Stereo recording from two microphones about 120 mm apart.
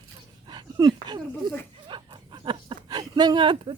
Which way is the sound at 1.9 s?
45° right (ahead or behind).